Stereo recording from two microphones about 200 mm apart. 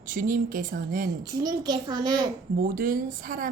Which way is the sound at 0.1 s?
45° right (ahead or behind).